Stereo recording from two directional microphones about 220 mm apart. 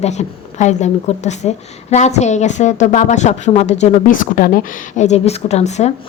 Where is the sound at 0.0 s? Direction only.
30° left (ahead or behind).